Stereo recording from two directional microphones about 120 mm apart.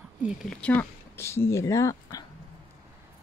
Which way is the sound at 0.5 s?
10° left (ahead or behind).